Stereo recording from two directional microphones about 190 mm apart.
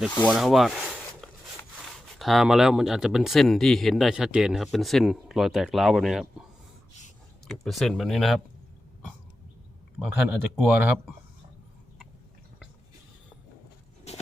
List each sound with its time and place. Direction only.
0.2 s speech: centre (ahead or behind)
7.4 s speech: centre (ahead or behind)
10.0 s speech: 5° right (ahead or behind)
14.1 s walk: 35° left (ahead or behind)